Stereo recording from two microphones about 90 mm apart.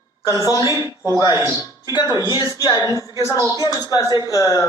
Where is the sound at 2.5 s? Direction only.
45° left (ahead or behind).